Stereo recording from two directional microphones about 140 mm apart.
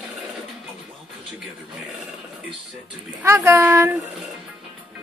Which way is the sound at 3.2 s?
20° right (ahead or behind).